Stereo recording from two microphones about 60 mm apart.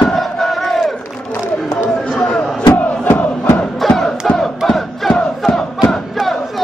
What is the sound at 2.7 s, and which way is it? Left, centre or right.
Crowd, left.